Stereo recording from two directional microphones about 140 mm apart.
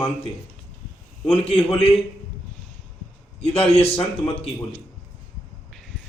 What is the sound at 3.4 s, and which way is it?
Speech, 45° left (ahead or behind).